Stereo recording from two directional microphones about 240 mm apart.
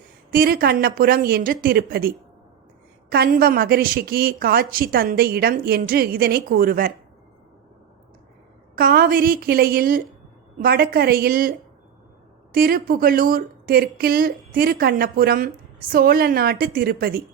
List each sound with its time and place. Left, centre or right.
0.3 s a woman's voice: right
8.7 s a woman's voice: right